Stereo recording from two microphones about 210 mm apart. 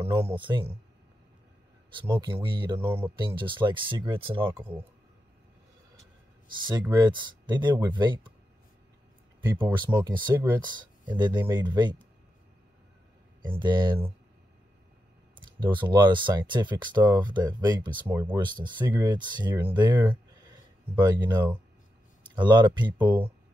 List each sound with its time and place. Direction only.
0.1 s speech: 15° right (ahead or behind)
2.0 s speech: 10° right (ahead or behind)
2.4 s speech: 20° right (ahead or behind)
2.8 s speech: 10° right (ahead or behind)
3.2 s speech: 25° right (ahead or behind)
4.5 s speech: 10° right (ahead or behind)
6.7 s speech: 20° right (ahead or behind)
9.5 s speech: 10° right (ahead or behind)
13.5 s speech: 20° right (ahead or behind)
15.3 s speech: 20° right (ahead or behind)